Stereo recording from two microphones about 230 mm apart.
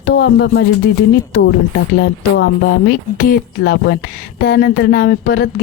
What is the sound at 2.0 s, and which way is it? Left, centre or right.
A woman's voice, left.